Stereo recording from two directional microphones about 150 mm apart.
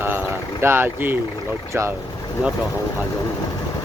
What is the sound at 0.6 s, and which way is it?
Speech, 15° right (ahead or behind).